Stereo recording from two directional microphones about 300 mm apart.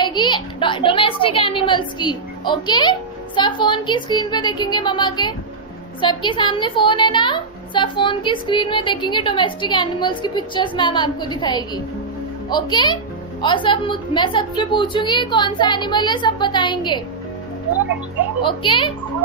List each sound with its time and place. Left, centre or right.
0.0 s a woman's voice: centre
18.4 s a woman's voice: centre